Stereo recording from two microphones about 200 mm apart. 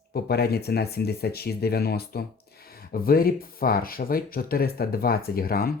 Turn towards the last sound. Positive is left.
turn(degrees=50)  # may be behind; listen again after turning